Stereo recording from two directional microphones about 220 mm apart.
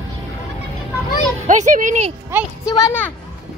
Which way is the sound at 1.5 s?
35° right (ahead or behind).